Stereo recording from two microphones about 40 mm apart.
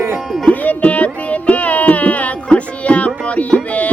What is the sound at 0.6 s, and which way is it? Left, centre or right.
Music, left.